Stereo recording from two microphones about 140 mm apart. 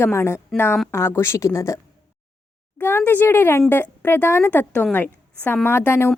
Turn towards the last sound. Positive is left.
turn(degrees=15)  # may be behind; listen again after turning